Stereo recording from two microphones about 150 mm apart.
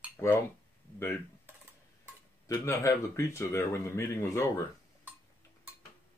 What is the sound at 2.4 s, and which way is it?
Speech, 20° left (ahead or behind).